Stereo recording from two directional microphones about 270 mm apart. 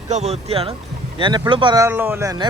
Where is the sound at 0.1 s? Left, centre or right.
Right.